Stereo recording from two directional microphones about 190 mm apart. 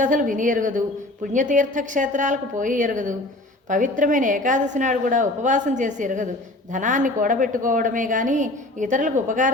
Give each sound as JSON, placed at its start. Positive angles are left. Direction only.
{"t": 0.0, "sound": "a woman's voice", "side_deg": -40}